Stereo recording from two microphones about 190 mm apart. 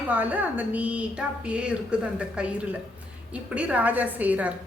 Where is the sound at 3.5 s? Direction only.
5° right (ahead or behind).